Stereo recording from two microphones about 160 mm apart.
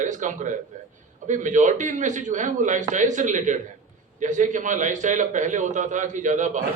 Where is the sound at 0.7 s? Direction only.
50° right (ahead or behind).